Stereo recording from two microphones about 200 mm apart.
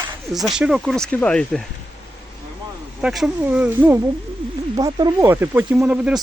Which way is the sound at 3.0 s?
5° right (ahead or behind).